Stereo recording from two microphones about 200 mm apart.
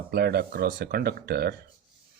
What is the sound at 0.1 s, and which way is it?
Speech, 50° right (ahead or behind).